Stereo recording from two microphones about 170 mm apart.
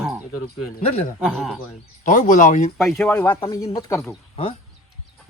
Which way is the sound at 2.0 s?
50° left (ahead or behind).